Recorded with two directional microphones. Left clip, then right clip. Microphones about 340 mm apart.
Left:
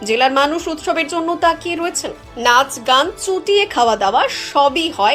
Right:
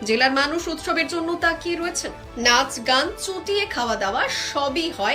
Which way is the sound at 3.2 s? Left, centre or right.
Centre.